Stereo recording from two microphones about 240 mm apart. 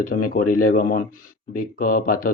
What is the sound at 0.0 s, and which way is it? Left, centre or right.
Speech, left.